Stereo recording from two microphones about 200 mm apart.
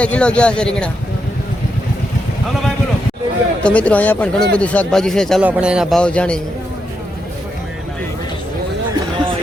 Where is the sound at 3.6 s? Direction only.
5° left (ahead or behind).